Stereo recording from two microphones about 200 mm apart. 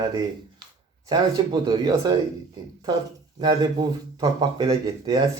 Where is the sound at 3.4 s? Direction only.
20° right (ahead or behind).